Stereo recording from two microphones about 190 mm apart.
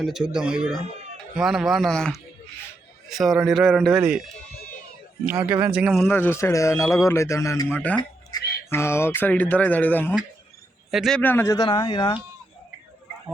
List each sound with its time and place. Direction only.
0.0 s a man's voice: centre (ahead or behind)
5.2 s a man's voice: 10° right (ahead or behind)
6.1 s a man's voice: 10° left (ahead or behind)
7.9 s music: 20° left (ahead or behind)
8.7 s a man's voice: 15° left (ahead or behind)